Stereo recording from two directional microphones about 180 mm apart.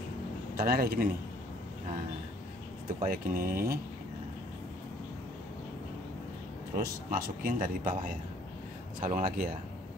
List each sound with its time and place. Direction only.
0.6 s a man's voice: 55° right (ahead or behind)
3.0 s speech: 50° right (ahead or behind)
6.8 s speech: 50° right (ahead or behind)